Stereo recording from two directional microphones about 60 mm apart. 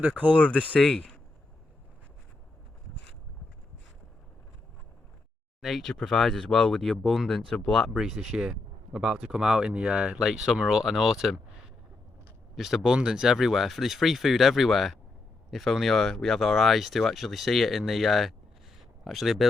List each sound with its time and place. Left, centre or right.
0.3 s speech: left
5.6 s speech: centre
7.9 s speech: centre
12.5 s speech: centre
18.8 s a sound: centre